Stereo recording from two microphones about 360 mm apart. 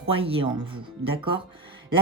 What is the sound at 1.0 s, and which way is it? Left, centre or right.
Speech, right.